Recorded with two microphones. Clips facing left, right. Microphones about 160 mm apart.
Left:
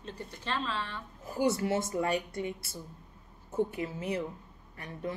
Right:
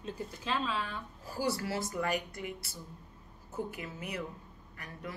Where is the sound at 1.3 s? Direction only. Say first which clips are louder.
Left 5 dB; 20° left (ahead or behind).